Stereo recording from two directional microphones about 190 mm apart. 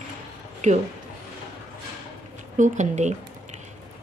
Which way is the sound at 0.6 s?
40° right (ahead or behind).